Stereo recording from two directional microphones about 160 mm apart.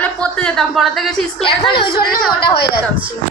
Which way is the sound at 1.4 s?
35° left (ahead or behind).